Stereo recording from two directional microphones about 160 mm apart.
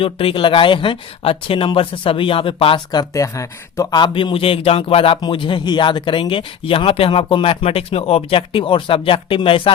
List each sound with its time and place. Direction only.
0.0 s speech: 35° left (ahead or behind)